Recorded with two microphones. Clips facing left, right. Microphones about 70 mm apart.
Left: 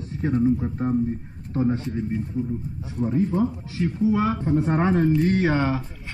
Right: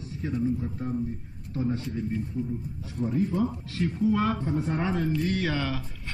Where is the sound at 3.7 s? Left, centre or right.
Centre.